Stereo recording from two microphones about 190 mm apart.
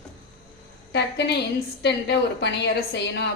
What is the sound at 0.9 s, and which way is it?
A woman's voice, 65° left (ahead or behind).